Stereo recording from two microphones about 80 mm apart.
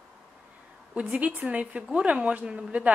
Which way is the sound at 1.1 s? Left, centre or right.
Centre.